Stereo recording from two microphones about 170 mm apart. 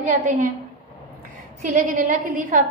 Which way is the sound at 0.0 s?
50° right (ahead or behind).